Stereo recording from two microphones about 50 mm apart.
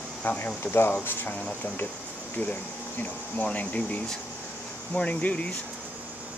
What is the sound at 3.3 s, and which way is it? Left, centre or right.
Speech, left.